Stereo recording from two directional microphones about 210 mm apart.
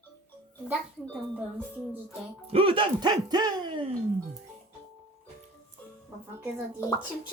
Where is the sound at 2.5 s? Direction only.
25° right (ahead or behind).